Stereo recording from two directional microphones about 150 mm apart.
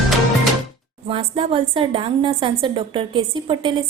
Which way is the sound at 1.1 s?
40° right (ahead or behind).